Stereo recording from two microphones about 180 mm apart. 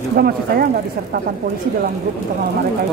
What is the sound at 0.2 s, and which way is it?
Speech, 60° right (ahead or behind).